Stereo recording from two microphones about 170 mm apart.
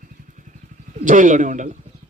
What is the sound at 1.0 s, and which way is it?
Speech, 50° right (ahead or behind).